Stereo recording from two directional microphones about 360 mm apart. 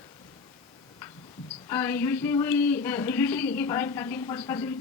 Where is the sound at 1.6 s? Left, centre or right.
Centre.